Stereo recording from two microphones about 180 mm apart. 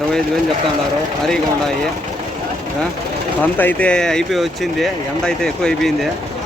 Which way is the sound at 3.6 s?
10° left (ahead or behind).